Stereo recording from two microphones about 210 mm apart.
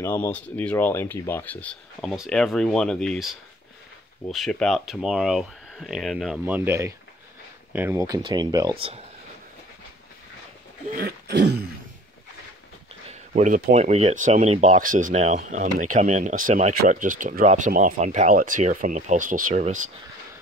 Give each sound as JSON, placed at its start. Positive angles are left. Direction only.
{"t": 0.0, "sound": "speech", "side_deg": 10}
{"t": 11.0, "sound": "throat clearing", "side_deg": -50}
{"t": 13.1, "sound": "speech", "side_deg": -35}